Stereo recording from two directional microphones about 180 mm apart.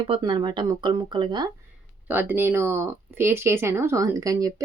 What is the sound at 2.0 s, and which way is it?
Speech, 10° right (ahead or behind).